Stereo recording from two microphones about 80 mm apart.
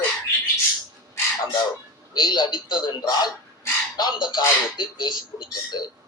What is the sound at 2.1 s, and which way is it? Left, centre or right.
Speech, left.